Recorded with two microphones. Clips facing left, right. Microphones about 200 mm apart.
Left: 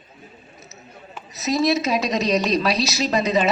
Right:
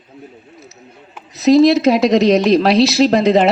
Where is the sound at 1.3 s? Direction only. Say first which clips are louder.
Right 11 dB; 60° right (ahead or behind).